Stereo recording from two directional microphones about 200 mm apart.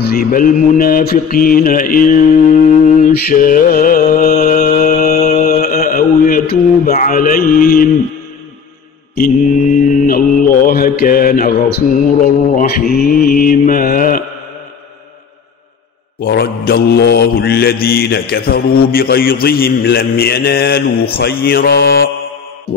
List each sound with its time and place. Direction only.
0.0 s mantra: 50° left (ahead or behind)
9.1 s mantra: 40° left (ahead or behind)
16.2 s mantra: 50° left (ahead or behind)